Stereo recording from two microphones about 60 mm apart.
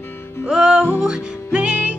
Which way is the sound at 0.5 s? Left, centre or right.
Centre.